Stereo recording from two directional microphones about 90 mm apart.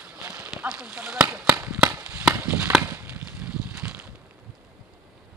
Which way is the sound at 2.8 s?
15° right (ahead or behind).